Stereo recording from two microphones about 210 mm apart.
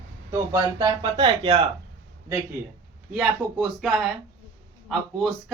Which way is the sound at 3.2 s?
5° right (ahead or behind).